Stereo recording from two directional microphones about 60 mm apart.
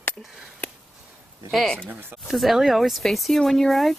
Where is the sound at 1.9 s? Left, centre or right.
Right.